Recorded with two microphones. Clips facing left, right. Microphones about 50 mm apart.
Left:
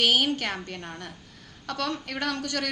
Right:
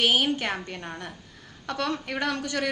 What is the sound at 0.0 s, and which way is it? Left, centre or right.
A woman's voice, centre.